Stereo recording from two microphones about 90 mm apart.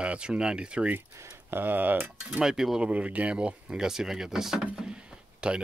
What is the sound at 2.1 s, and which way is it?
Speech, 5° right (ahead or behind).